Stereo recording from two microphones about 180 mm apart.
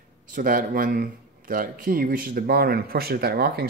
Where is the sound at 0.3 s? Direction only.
50° right (ahead or behind).